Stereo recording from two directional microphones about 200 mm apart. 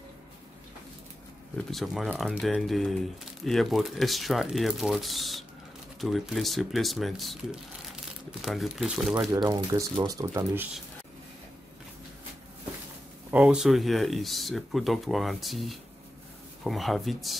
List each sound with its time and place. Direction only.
1.7 s speech: centre (ahead or behind)
9.3 s speech: 15° right (ahead or behind)
13.3 s speech: 5° right (ahead or behind)